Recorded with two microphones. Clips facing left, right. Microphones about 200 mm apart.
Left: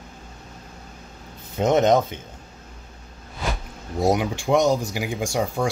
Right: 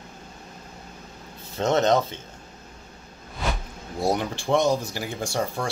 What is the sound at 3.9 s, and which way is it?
Speech, 15° left (ahead or behind).